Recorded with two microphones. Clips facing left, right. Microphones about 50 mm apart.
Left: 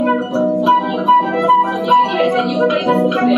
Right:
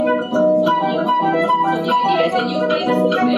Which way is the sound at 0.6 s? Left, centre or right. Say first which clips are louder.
Left 2 dB; centre.